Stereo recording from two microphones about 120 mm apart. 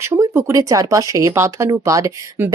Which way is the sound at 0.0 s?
20° right (ahead or behind).